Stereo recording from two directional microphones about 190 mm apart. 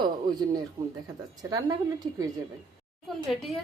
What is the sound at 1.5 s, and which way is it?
Speech, 20° right (ahead or behind).